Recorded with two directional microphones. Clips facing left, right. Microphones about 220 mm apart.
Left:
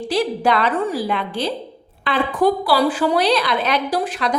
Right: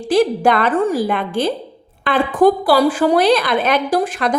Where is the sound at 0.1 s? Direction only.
50° right (ahead or behind).